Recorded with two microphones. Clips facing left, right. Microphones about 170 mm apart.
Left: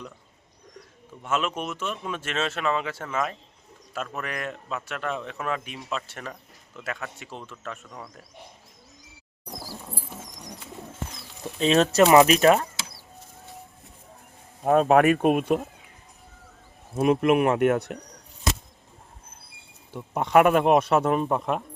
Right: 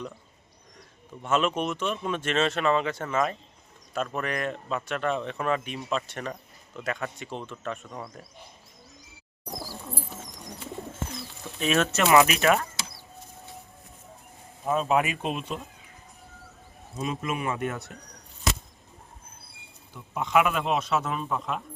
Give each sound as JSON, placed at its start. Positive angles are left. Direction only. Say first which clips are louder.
{"t": 1.2, "sound": "a man's voice", "louder": "right 3 dB", "side_deg": 5}
{"t": 11.6, "sound": "speech", "louder": "left 6 dB", "side_deg": 30}
{"t": 14.6, "sound": "speech", "louder": "left 7 dB", "side_deg": 55}
{"t": 16.9, "sound": "speech", "louder": "left 11 dB", "side_deg": 60}
{"t": 19.9, "sound": "speech", "louder": "left 5 dB", "side_deg": 55}